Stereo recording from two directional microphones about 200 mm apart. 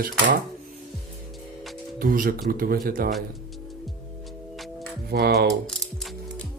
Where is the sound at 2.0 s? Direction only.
45° right (ahead or behind).